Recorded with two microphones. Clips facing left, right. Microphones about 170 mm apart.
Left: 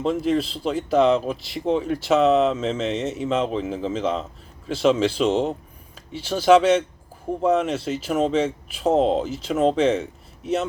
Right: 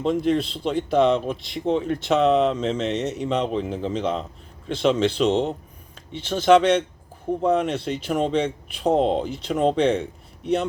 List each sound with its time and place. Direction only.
0.0 s speech: 5° left (ahead or behind)